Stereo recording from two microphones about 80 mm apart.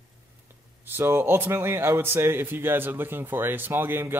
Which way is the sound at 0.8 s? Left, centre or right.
Right.